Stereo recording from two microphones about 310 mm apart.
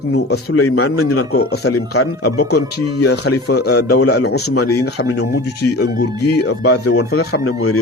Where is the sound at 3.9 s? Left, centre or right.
Left.